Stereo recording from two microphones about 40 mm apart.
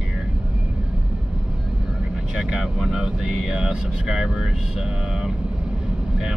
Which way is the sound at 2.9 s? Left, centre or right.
Centre.